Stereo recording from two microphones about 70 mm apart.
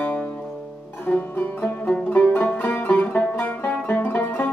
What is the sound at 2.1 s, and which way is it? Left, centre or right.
Music, left.